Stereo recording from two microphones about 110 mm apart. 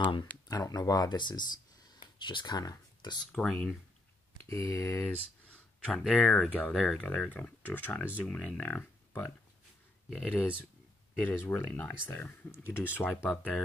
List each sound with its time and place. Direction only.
0.5 s speech: 35° left (ahead or behind)
3.3 s speech: 10° left (ahead or behind)
4.5 s speech: 25° left (ahead or behind)
5.0 s a sound: 10° left (ahead or behind)
6.1 s speech: 10° left (ahead or behind)
7.0 s speech: 10° left (ahead or behind)